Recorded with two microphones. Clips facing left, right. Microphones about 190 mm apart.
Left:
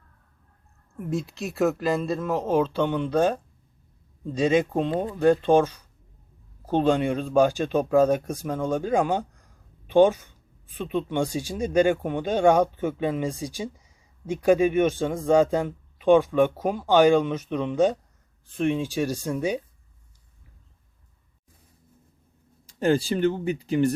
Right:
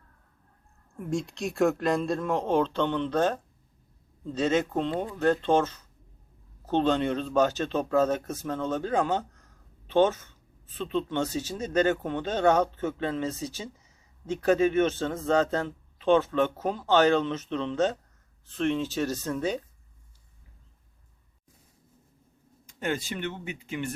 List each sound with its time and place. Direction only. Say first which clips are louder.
0.9 s speech: left 1 dB; centre (ahead or behind)
22.6 s speech: left 9 dB; 35° left (ahead or behind)